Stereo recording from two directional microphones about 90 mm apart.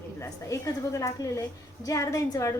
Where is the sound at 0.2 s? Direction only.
35° left (ahead or behind).